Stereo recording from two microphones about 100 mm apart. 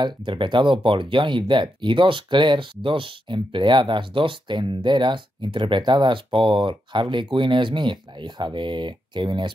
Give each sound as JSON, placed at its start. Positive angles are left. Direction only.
{"t": 0.0, "sound": "speech", "side_deg": -55}